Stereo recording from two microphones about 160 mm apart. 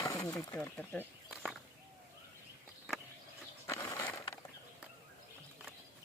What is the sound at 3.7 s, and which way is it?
Ratchet, 15° left (ahead or behind).